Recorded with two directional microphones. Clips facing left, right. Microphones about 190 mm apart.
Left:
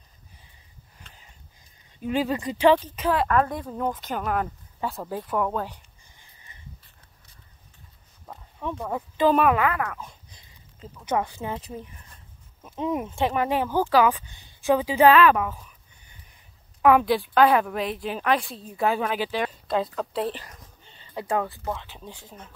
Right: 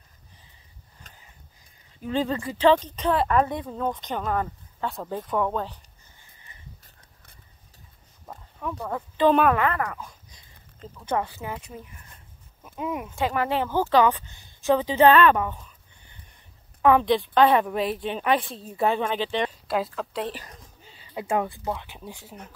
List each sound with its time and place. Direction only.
2.0 s a woman's voice: 15° left (ahead or behind)
8.6 s speech: 20° left (ahead or behind)
8.9 s speech: 10° left (ahead or behind)
9.9 s a sound: 25° left (ahead or behind)
10.8 s speech: 15° left (ahead or behind)
11.4 s speech: 30° left (ahead or behind); by 15.6 s 5° left (ahead or behind)
16.8 s a woman's voice: 5° left (ahead or behind)
20.8 s a sound: 5° right (ahead or behind)
21.1 s speech: 20° right (ahead or behind)